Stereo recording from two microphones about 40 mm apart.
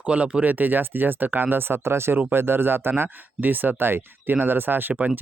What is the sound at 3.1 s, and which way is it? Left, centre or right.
Speech, right.